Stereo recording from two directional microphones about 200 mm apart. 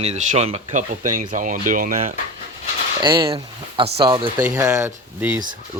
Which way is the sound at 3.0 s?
20° right (ahead or behind).